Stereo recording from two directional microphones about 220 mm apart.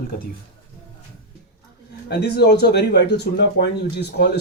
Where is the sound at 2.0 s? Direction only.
50° left (ahead or behind).